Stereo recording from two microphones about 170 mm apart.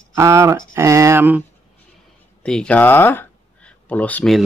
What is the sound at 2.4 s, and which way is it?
Speech, 5° left (ahead or behind).